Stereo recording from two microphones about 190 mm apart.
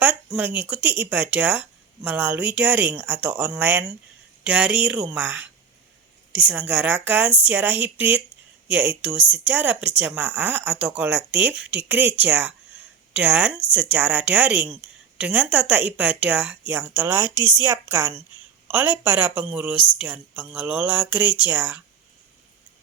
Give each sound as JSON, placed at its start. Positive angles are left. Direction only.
{"t": 0.0, "sound": "speech", "side_deg": -10}
{"t": 17.2, "sound": "a woman's voice", "side_deg": 20}
{"t": 17.6, "sound": "speech", "side_deg": -15}